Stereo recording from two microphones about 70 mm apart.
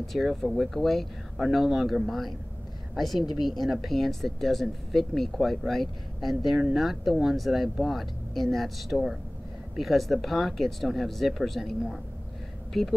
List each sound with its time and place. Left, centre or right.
0.0 s speech: centre
12.7 s speech: centre